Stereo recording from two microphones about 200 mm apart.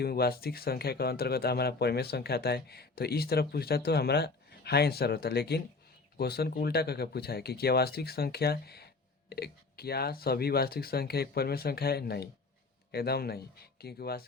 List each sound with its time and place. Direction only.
0.0 s speech: 50° left (ahead or behind)